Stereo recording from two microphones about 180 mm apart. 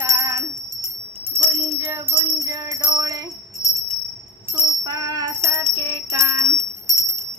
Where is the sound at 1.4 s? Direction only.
15° right (ahead or behind).